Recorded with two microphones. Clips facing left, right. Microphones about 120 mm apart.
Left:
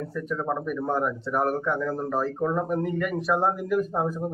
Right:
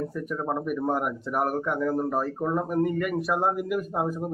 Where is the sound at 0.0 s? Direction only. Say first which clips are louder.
Even; 15° right (ahead or behind).